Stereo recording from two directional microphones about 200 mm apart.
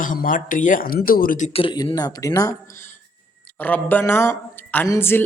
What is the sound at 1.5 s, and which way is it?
Speech, 25° left (ahead or behind).